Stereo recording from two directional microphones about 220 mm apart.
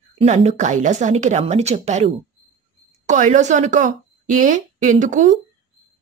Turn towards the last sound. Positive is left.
turn(degrees=-35)  # may be behind; listen again after turning